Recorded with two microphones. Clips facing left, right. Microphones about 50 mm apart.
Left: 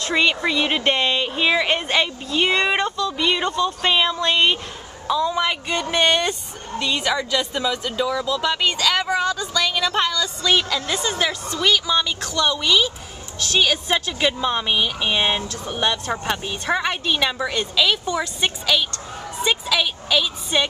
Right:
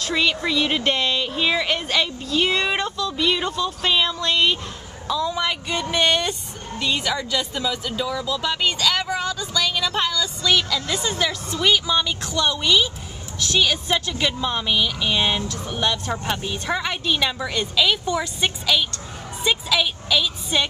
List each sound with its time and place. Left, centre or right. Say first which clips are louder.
0.0 s a woman's voice: left 2 dB; centre
3.8 s a woman's voice: left 1 dB; centre
10.5 s speech: left 1 dB; left
10.9 s speech: left 1 dB; centre
11.5 s speech: even; centre
12.2 s a woman's voice: left 1 dB; centre
12.4 s speech: even; centre
13.6 s a woman's voice: left 1 dB; centre
19.4 s a sound: even; centre
20.5 s a woman's voice: left 2 dB; centre